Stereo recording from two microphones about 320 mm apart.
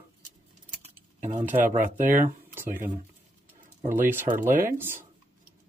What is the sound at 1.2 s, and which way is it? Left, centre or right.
Speech, right.